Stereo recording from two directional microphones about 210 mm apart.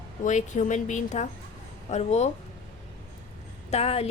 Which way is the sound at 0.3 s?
35° left (ahead or behind).